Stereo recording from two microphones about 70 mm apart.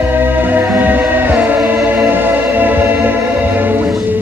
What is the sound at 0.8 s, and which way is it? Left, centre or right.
Music, right.